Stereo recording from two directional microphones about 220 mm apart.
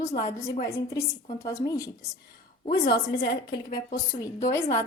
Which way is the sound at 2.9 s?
50° left (ahead or behind).